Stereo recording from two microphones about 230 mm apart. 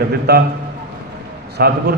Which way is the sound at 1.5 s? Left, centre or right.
Right.